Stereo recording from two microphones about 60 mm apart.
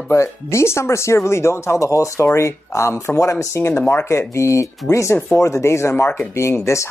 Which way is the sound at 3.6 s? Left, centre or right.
Left.